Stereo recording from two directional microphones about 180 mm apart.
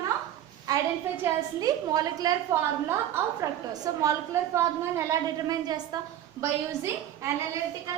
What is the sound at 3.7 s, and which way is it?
A woman's voice, 20° right (ahead or behind).